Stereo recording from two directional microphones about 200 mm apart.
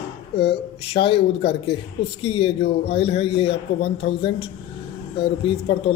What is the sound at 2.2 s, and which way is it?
A man's voice, 30° left (ahead or behind).